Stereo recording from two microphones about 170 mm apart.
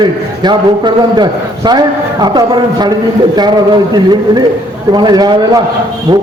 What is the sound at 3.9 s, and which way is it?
A man's voice, 25° right (ahead or behind).